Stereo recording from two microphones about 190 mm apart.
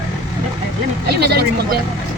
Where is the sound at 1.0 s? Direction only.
60° right (ahead or behind).